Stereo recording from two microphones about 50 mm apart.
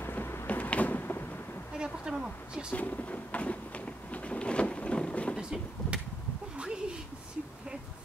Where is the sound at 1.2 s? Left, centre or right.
Left.